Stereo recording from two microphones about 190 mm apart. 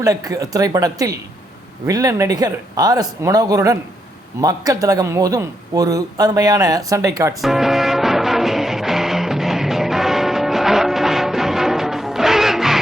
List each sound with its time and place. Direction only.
0.0 s a man's voice: 20° right (ahead or behind)
7.4 s music: centre (ahead or behind)